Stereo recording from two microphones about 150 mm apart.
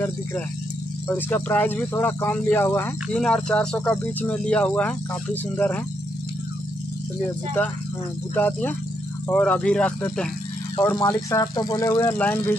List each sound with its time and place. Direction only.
1.0 s speech: 10° left (ahead or behind)
8.4 s speech: 10° left (ahead or behind)
11.0 s speech: 20° left (ahead or behind)